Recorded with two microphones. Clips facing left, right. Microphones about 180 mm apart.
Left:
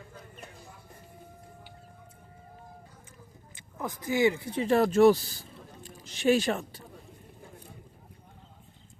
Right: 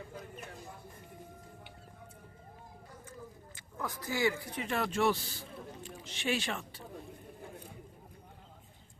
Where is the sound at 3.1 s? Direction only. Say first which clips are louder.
Right 5 dB; 20° left (ahead or behind); by 6.8 s 40° left (ahead or behind).